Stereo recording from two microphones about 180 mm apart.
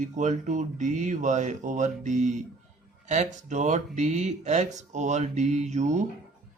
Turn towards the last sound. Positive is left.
turn(degrees=-40)  # may be behind; listen again after turning